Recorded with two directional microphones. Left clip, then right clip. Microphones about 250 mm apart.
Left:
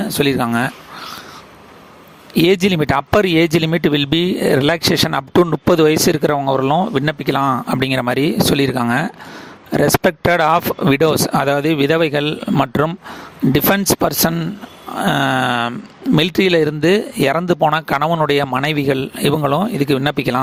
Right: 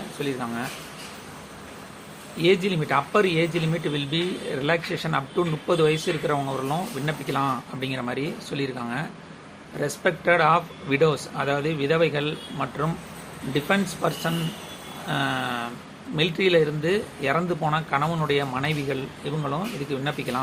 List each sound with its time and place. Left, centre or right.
0.2 s speech: left
2.4 s speech: left